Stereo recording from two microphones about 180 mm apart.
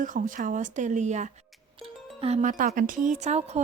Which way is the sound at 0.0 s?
45° right (ahead or behind).